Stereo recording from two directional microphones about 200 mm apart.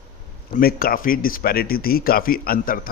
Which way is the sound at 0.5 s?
45° left (ahead or behind).